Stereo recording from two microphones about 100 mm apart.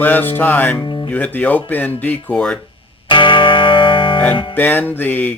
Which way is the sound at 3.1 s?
55° left (ahead or behind).